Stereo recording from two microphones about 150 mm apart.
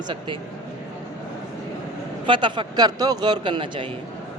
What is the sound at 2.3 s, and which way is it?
A man's voice, 30° right (ahead or behind).